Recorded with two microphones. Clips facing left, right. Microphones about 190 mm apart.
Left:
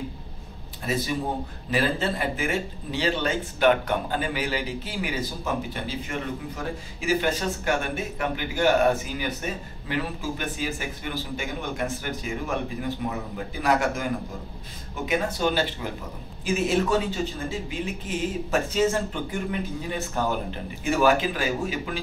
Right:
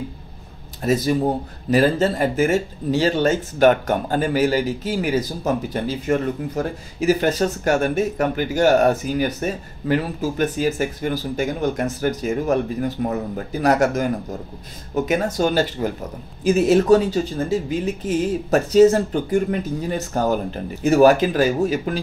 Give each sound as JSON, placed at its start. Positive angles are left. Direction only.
{"t": 0.8, "sound": "speech", "side_deg": -45}
{"t": 15.0, "sound": "speech", "side_deg": -40}